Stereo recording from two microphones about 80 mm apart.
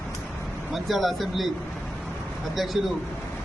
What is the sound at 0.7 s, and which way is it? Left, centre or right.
Speech, centre.